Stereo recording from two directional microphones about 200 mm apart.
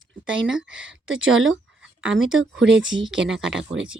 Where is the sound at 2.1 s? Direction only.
75° right (ahead or behind).